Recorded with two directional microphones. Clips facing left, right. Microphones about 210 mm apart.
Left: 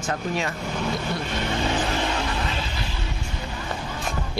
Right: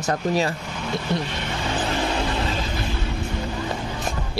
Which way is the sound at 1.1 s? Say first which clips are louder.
Right 4 dB; 20° right (ahead or behind).